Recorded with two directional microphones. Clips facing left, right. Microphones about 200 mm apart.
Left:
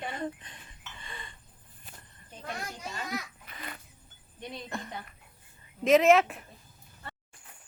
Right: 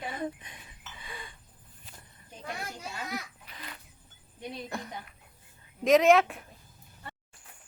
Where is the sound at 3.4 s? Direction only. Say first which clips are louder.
Left 3 dB; 55° left (ahead or behind).